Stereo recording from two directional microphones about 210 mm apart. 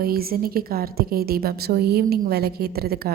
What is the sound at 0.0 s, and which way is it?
A woman's voice, 45° right (ahead or behind).